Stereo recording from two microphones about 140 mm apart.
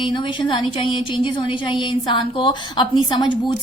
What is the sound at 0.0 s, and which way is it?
A woman's voice, 35° left (ahead or behind).